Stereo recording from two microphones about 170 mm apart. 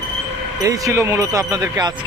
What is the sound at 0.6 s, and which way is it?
Speech, 20° right (ahead or behind).